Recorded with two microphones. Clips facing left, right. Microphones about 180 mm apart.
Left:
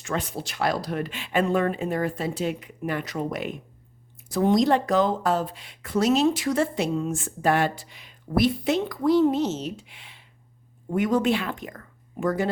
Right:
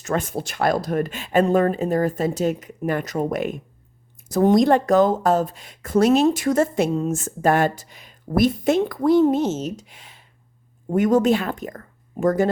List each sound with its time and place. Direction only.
0.0 s speech: 50° right (ahead or behind)